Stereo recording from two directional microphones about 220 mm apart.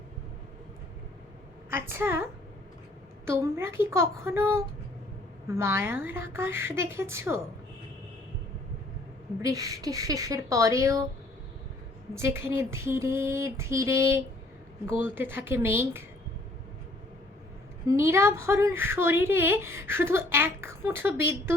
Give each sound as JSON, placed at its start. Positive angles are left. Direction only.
{"t": 1.7, "sound": "speech", "side_deg": -10}
{"t": 9.4, "sound": "speech", "side_deg": -15}
{"t": 12.1, "sound": "speech", "side_deg": -10}
{"t": 17.8, "sound": "speech", "side_deg": -10}